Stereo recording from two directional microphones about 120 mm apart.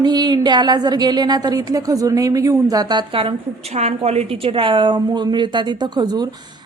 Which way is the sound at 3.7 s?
65° right (ahead or behind).